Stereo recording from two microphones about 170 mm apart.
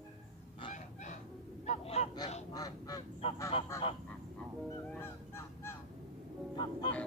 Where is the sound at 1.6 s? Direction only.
40° left (ahead or behind).